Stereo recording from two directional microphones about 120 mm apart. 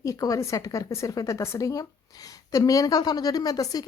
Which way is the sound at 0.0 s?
30° left (ahead or behind).